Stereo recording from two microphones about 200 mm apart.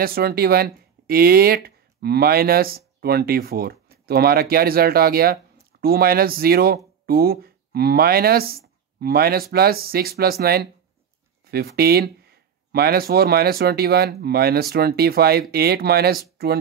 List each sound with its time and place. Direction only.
0.0 s speech: 50° right (ahead or behind)